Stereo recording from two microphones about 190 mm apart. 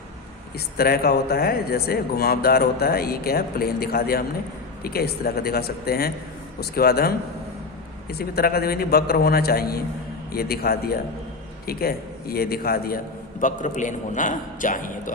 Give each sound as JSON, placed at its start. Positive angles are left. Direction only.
{"t": 0.8, "sound": "speech", "side_deg": 55}
{"t": 8.2, "sound": "speech", "side_deg": 55}
{"t": 13.4, "sound": "speech", "side_deg": 40}